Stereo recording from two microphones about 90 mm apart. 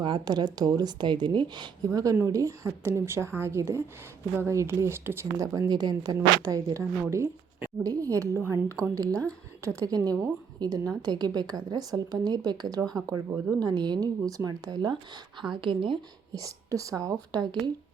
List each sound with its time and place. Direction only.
0.0 s speech: 55° right (ahead or behind)
1.9 s speech: 40° right (ahead or behind); by 16.0 s 70° right (ahead or behind)
16.3 s speech: 40° right (ahead or behind)
17.3 s speech: 50° right (ahead or behind)